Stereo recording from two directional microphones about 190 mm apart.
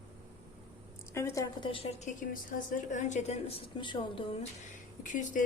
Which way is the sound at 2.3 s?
40° left (ahead or behind).